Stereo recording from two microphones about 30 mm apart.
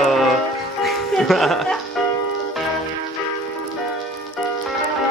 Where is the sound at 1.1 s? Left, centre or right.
Centre.